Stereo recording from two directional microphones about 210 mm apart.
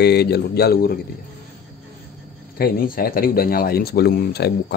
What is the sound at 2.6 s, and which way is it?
Speech, 45° left (ahead or behind).